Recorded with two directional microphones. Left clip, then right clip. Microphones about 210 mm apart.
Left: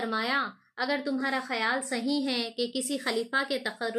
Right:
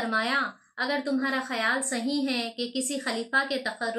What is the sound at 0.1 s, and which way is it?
A woman's voice, 45° left (ahead or behind).